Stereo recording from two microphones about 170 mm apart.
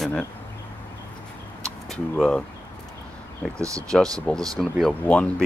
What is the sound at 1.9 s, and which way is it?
Speech, 5° left (ahead or behind).